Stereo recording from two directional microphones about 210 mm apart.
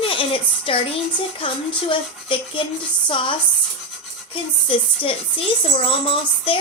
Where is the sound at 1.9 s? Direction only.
25° left (ahead or behind).